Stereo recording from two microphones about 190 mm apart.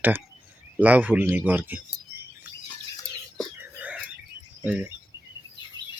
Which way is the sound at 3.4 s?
5° right (ahead or behind).